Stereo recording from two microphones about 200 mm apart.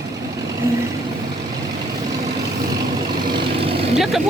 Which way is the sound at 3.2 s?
25° right (ahead or behind).